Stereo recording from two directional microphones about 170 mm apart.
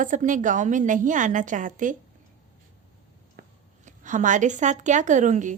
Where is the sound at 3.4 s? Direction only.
50° right (ahead or behind).